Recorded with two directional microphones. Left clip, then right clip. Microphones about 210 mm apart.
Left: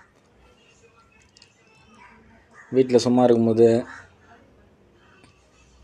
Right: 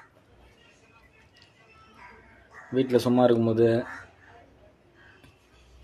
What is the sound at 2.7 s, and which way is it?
Speech, 15° left (ahead or behind).